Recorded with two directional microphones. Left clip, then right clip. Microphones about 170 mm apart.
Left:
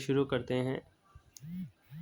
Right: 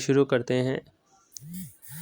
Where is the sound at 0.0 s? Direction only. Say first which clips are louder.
Right 9 dB; 30° right (ahead or behind).